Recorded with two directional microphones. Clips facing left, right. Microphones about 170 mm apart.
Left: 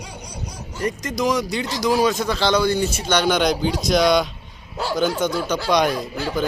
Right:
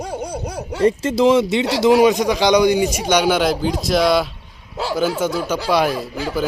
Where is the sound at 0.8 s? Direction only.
30° right (ahead or behind).